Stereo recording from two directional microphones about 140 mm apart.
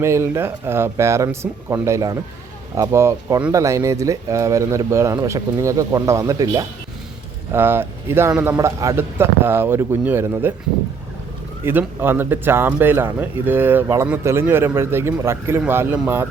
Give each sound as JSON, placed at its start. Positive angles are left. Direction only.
{"t": 0.0, "sound": "a man's voice", "side_deg": -20}
{"t": 11.6, "sound": "a man's voice", "side_deg": -15}